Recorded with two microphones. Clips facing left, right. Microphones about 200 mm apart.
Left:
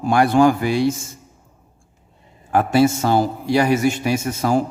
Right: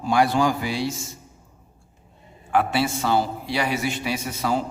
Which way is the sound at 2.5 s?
45° left (ahead or behind).